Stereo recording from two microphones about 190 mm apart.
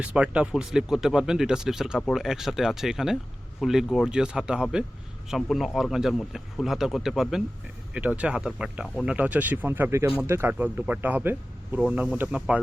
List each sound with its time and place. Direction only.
0.0 s speech: 5° right (ahead or behind)